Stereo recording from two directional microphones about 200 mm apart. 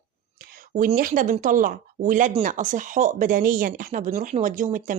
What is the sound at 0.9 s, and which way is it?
Speech, 45° right (ahead or behind).